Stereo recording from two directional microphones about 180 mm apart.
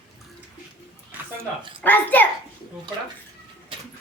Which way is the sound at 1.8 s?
10° left (ahead or behind).